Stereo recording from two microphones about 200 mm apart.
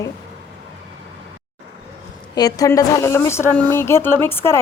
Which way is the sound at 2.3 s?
20° left (ahead or behind).